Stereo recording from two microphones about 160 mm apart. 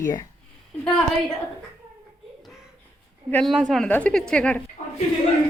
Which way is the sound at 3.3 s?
Centre (ahead or behind).